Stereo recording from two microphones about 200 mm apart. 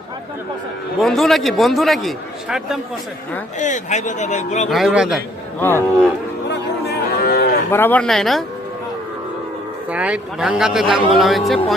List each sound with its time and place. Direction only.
1.0 s a man's voice: centre (ahead or behind)
3.6 s speech: 35° left (ahead or behind)
4.7 s a man's voice: centre (ahead or behind)
5.5 s speech: 10° left (ahead or behind)
6.5 s cattle: 50° left (ahead or behind)
7.7 s a man's voice: 10° left (ahead or behind)
9.9 s a man's voice: 5° right (ahead or behind)